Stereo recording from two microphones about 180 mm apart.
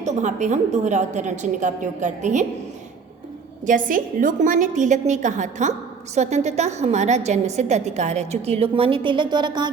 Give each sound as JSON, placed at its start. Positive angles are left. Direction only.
{"t": 0.0, "sound": "a woman's voice", "side_deg": -40}
{"t": 3.7, "sound": "a woman's voice", "side_deg": -50}